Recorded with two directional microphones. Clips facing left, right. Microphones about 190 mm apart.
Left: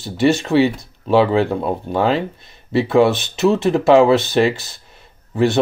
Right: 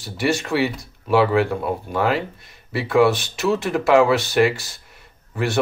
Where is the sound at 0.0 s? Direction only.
25° left (ahead or behind).